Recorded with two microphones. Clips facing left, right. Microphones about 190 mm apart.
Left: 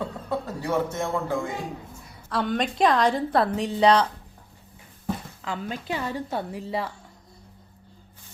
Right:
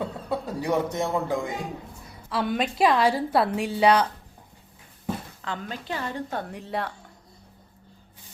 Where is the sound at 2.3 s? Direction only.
5° right (ahead or behind).